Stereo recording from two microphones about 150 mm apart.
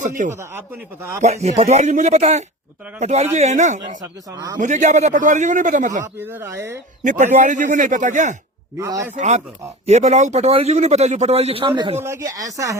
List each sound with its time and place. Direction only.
0.2 s a man's voice: 55° right (ahead or behind)
1.2 s a man's voice: 45° right (ahead or behind)
4.0 s speech: 25° right (ahead or behind)
4.6 s a man's voice: 50° right (ahead or behind)
6.1 s speech: 15° right (ahead or behind)
7.0 s a man's voice: 55° right (ahead or behind)
8.8 s speech: 20° right (ahead or behind)
9.1 s a man's voice: 50° right (ahead or behind); by 11.9 s 30° right (ahead or behind)
11.9 s speech: 15° right (ahead or behind)